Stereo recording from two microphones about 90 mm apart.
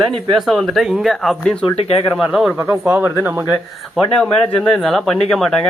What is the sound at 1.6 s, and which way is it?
Speech, 90° left.